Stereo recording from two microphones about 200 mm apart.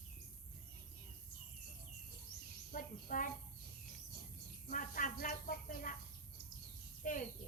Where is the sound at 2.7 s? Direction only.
40° left (ahead or behind).